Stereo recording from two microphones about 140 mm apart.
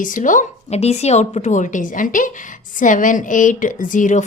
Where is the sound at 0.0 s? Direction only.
70° left (ahead or behind).